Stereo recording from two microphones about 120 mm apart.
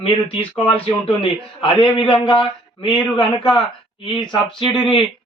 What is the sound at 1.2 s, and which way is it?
Speech, 45° left (ahead or behind).